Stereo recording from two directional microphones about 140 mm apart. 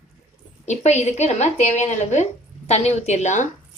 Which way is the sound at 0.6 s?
55° left (ahead or behind).